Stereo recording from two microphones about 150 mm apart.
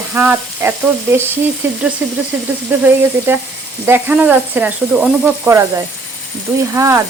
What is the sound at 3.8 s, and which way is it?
Speech, 10° right (ahead or behind).